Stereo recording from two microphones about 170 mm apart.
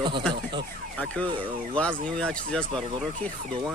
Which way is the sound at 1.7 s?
5° left (ahead or behind).